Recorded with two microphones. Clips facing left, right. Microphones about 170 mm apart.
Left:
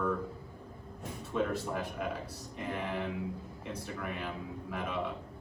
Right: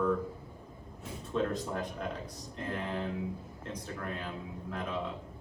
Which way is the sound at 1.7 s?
10° left (ahead or behind).